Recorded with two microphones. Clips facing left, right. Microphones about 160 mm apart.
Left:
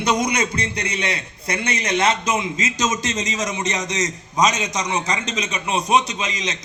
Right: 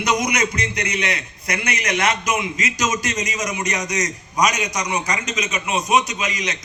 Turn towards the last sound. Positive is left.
turn(degrees=25)  # may be behind; listen again after turning